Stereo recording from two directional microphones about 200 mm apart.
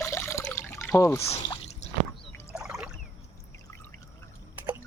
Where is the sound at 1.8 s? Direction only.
35° left (ahead or behind).